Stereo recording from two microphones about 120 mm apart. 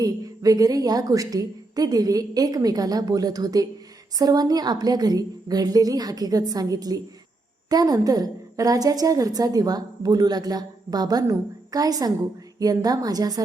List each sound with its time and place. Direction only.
0.0 s a woman's voice: 30° right (ahead or behind)